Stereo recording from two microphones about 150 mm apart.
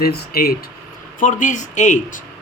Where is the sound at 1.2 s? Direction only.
60° left (ahead or behind).